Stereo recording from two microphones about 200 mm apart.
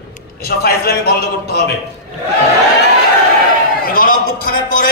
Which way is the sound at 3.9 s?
45° left (ahead or behind).